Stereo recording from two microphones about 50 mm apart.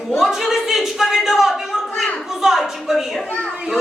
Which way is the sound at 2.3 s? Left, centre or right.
Centre.